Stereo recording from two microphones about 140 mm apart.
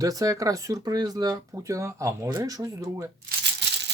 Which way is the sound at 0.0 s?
25° right (ahead or behind).